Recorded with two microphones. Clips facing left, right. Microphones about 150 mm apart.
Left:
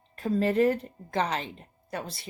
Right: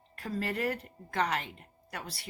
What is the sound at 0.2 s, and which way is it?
Speech, 25° left (ahead or behind).